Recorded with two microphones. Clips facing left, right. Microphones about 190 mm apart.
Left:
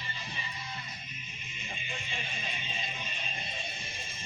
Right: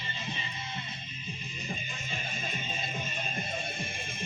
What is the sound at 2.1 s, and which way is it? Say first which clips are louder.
Music: right 6 dB; 45° right (ahead or behind).